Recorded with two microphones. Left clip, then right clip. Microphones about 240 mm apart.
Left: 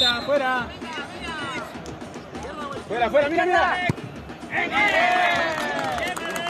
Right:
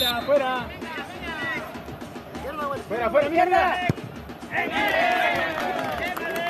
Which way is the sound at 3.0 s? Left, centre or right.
Left.